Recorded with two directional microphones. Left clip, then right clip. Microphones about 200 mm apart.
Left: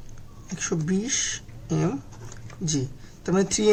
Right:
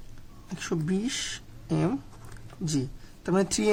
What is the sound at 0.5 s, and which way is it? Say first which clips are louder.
Speech: left 3 dB; 30° right (ahead or behind).